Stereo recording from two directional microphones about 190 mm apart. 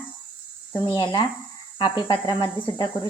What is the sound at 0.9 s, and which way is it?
Speech, 20° left (ahead or behind).